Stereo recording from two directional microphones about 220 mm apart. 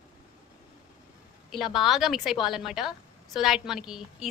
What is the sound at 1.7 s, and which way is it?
A woman's voice, centre (ahead or behind).